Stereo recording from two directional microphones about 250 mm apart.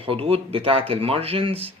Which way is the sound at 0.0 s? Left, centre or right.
Right.